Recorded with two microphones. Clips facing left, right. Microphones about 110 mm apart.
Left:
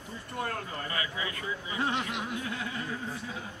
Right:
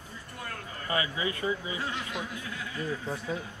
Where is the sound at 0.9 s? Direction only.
25° right (ahead or behind).